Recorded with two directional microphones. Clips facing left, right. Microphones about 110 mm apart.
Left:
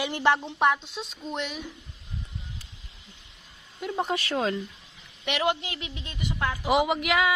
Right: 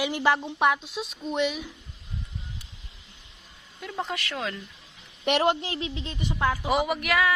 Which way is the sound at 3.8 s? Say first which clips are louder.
Left 4 dB; 20° left (ahead or behind).